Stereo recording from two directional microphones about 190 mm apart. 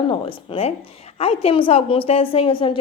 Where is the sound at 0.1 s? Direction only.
30° left (ahead or behind).